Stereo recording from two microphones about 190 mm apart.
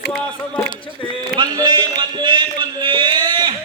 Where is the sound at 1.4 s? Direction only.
25° right (ahead or behind).